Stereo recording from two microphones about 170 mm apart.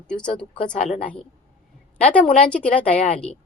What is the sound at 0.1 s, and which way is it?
Speech, 5° left (ahead or behind).